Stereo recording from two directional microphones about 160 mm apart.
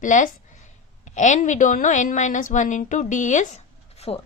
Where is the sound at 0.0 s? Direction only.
50° left (ahead or behind).